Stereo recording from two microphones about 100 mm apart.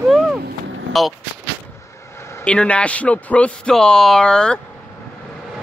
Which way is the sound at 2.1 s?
30° left (ahead or behind).